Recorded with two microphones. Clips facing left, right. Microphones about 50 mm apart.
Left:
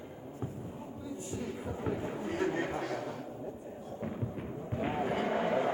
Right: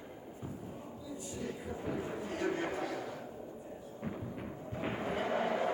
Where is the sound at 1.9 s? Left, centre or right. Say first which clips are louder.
Left 3 dB; left.